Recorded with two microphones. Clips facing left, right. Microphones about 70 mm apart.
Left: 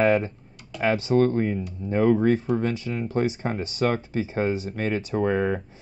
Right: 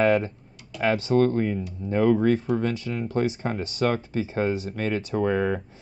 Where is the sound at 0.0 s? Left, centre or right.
Centre.